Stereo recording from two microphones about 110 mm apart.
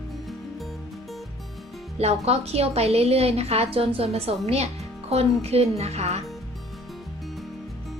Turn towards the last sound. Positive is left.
turn(degrees=-75)  # may be behind; listen again after turning